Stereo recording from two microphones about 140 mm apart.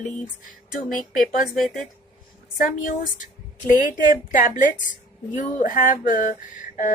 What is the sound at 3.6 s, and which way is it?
Speech, 70° left (ahead or behind).